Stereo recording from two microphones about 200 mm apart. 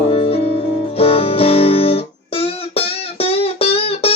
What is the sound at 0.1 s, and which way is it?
Music, 30° left (ahead or behind).